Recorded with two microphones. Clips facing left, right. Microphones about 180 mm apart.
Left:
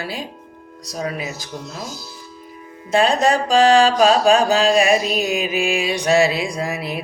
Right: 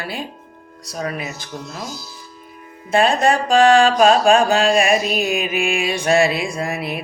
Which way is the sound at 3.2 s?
55° right (ahead or behind).